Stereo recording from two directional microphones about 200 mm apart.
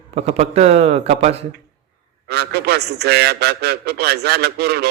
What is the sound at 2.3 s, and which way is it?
A man's voice, 55° right (ahead or behind).